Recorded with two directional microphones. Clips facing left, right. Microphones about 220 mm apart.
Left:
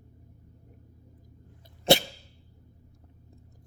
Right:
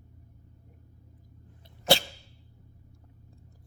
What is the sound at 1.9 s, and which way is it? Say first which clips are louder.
Cough: left 3 dB; 25° left (ahead or behind).